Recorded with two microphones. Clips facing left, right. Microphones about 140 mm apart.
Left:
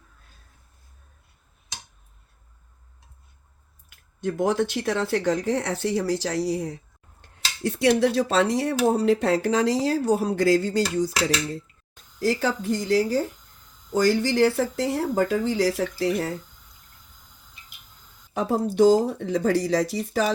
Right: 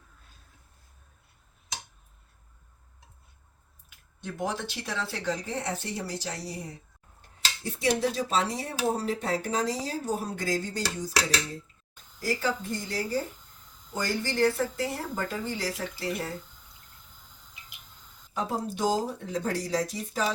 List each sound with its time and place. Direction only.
4.2 s speech: 50° left (ahead or behind)
5.4 s speech: 90° left
7.2 s speech: 75° left (ahead or behind)
12.2 s speech: 85° left
18.3 s speech: 65° left (ahead or behind)